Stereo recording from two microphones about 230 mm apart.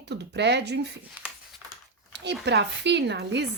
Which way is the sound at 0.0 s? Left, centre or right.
Right.